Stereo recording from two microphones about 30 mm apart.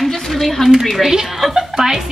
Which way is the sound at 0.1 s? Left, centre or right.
Centre.